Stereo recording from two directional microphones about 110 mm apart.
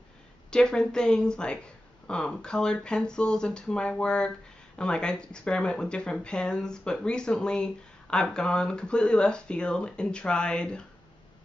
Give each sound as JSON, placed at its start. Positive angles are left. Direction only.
{"t": 0.5, "sound": "speech", "side_deg": 5}